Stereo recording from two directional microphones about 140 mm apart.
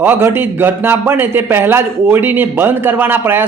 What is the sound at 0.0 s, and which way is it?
A man's voice, 15° right (ahead or behind).